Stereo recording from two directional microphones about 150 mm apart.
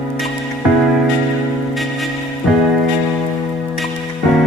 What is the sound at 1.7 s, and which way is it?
Music, centre (ahead or behind).